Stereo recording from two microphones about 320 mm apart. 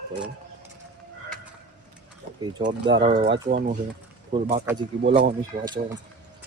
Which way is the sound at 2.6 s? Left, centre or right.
Centre.